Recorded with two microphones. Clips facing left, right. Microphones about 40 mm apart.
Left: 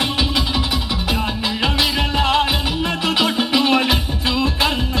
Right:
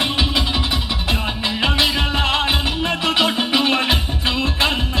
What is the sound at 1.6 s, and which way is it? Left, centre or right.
Music, right.